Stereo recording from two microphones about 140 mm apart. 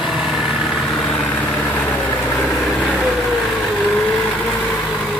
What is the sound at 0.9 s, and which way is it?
Vehicle, 10° left (ahead or behind).